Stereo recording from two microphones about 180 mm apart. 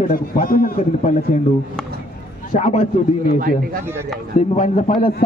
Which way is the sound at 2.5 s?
35° left (ahead or behind).